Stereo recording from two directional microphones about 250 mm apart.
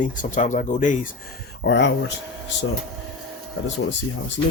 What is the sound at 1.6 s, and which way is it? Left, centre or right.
Speech, left.